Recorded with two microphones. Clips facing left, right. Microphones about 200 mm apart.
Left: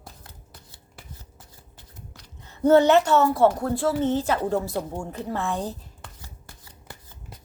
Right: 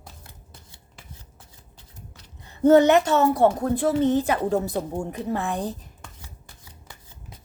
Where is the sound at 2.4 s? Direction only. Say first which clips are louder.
Right 2 dB; 15° right (ahead or behind).